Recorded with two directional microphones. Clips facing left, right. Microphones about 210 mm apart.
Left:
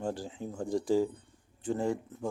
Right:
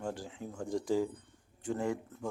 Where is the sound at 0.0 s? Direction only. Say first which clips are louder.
Left 4 dB; 30° left (ahead or behind).